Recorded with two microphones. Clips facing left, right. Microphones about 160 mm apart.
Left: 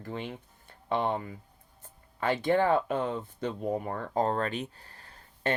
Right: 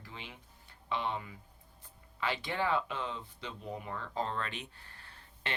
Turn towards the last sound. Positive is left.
turn(degrees=40)  # may be behind; listen again after turning